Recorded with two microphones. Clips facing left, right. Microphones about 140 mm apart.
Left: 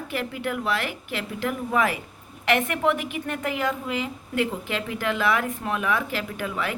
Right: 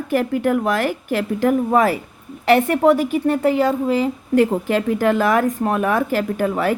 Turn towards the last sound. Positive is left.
turn(degrees=-45)  # may be behind; listen again after turning